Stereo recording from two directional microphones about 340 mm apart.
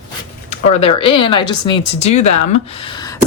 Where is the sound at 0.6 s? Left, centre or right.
Centre.